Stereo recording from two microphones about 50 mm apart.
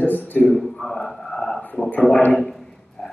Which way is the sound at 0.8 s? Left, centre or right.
Centre.